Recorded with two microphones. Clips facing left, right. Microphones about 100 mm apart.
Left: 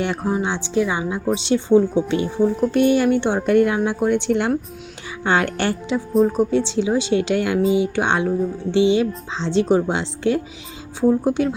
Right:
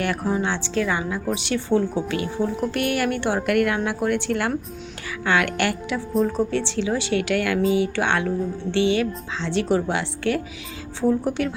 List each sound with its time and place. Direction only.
0.0 s a woman's voice: 20° left (ahead or behind)
5.2 s a woman's voice: 30° left (ahead or behind)
6.2 s a woman's voice: 15° left (ahead or behind)